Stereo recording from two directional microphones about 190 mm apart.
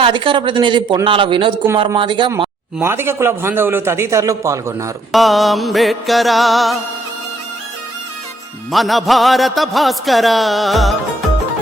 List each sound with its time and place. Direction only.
0.0 s speech: 25° right (ahead or behind)
2.7 s a man's voice: 15° right (ahead or behind)
5.1 s a man's voice: centre (ahead or behind)
8.7 s a man's voice: centre (ahead or behind)